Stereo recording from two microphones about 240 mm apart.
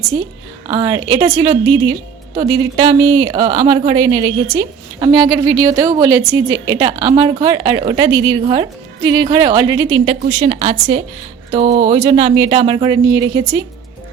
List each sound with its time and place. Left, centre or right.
0.7 s a woman's voice: centre